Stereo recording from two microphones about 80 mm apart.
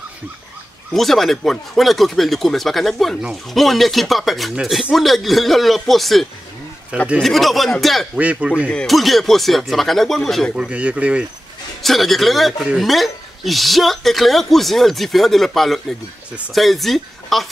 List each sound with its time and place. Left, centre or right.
0.9 s speech: centre
8.2 s speech: centre
8.6 s speech: centre
10.5 s speech: centre
11.8 s speech: centre